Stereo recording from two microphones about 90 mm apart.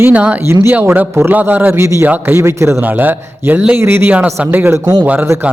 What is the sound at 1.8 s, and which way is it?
Speech, 30° right (ahead or behind).